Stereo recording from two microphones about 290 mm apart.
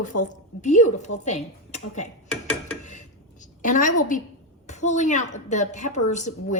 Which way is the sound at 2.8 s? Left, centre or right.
Left.